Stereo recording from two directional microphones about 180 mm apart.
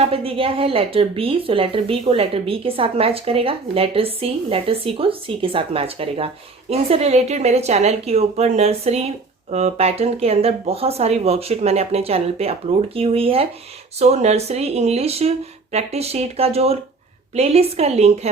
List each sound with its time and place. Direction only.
0.0 s a woman's voice: 30° right (ahead or behind)